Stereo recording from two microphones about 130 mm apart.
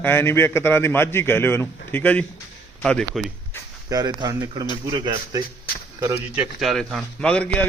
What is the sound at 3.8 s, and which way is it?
Speech, 30° right (ahead or behind).